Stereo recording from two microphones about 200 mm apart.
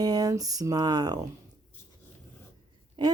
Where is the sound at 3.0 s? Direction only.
20° right (ahead or behind).